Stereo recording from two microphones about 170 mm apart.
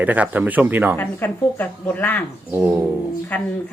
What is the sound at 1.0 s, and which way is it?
Speech, 10° left (ahead or behind).